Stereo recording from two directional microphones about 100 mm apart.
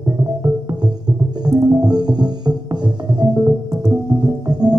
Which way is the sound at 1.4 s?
40° right (ahead or behind).